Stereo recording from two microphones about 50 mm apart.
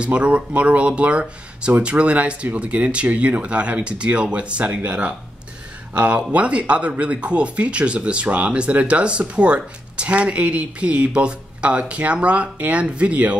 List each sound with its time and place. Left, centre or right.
0.0 s speech: right